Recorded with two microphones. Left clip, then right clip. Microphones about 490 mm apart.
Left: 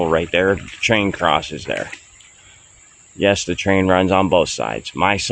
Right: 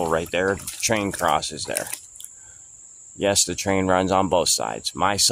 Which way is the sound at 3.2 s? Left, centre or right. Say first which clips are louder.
Left 4 dB; right.